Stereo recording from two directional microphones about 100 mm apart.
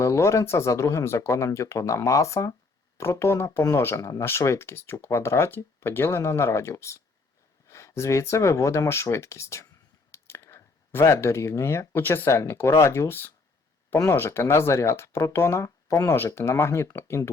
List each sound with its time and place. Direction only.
0.0 s speech: 30° left (ahead or behind)